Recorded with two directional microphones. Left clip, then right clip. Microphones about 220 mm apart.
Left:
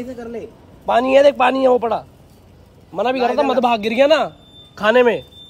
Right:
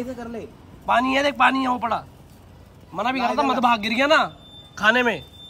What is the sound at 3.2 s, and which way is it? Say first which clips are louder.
A man's voice: left 4 dB; 10° right (ahead or behind).